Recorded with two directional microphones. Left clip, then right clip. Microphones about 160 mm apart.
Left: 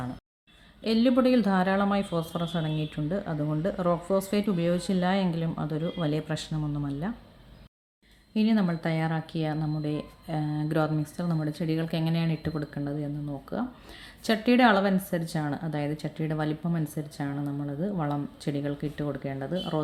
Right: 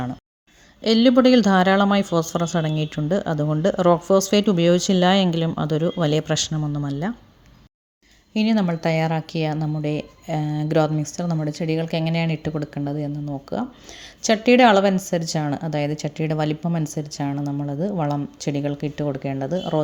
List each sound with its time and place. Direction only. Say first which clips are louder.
0.8 s speech: right 8 dB; 50° right (ahead or behind)
8.3 s speech: right 5 dB; 45° right (ahead or behind)